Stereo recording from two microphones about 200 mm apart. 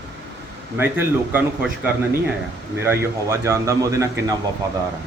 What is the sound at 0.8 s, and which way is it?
Speech, 10° right (ahead or behind).